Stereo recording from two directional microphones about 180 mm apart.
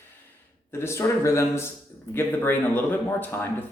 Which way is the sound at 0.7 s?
15° left (ahead or behind).